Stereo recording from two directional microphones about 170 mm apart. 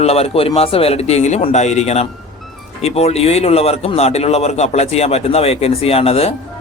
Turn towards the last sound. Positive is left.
turn(degrees=35)  # may be behind; listen again after turning